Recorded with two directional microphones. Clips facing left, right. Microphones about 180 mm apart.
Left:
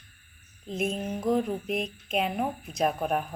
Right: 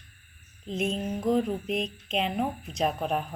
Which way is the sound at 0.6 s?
5° left (ahead or behind).